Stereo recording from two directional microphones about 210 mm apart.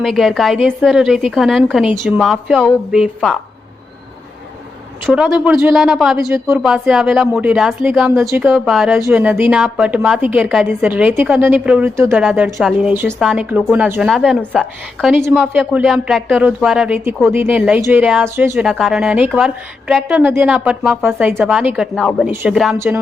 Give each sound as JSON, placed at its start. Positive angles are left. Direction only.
{"t": 0.0, "sound": "a woman's voice", "side_deg": 0}
{"t": 5.0, "sound": "a woman's voice", "side_deg": -5}
{"t": 6.1, "sound": "a woman's voice", "side_deg": -15}
{"t": 6.6, "sound": "a woman's voice", "side_deg": 0}